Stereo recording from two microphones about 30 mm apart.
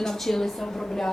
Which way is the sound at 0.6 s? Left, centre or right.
Left.